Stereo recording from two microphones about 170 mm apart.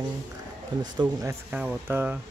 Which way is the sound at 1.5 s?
10° right (ahead or behind).